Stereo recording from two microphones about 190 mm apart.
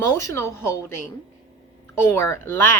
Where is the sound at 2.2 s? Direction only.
15° left (ahead or behind).